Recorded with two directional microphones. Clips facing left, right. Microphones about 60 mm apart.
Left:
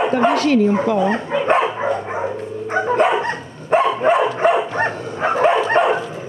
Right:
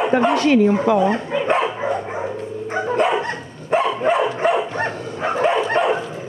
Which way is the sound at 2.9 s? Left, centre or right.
Left.